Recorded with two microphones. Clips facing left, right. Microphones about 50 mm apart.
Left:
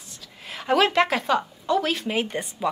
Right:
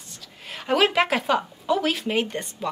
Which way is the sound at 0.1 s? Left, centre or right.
Centre.